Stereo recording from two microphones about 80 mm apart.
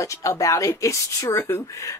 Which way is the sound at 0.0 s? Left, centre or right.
Left.